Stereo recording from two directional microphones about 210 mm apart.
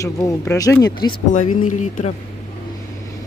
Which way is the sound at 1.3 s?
35° left (ahead or behind).